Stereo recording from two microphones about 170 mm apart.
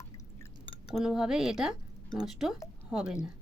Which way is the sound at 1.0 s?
5° right (ahead or behind).